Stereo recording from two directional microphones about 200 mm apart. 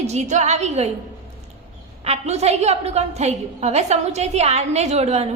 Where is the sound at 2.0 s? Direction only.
30° right (ahead or behind).